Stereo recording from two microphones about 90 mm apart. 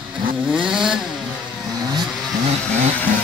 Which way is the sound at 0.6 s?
5° right (ahead or behind).